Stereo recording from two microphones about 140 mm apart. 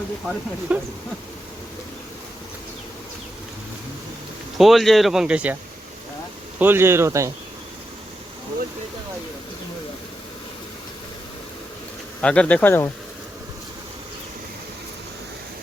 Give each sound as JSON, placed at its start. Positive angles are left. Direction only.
{"t": 0.7, "sound": "speech", "side_deg": -10}
{"t": 4.5, "sound": "speech", "side_deg": 0}
{"t": 6.6, "sound": "speech", "side_deg": -15}
{"t": 12.2, "sound": "speech", "side_deg": 10}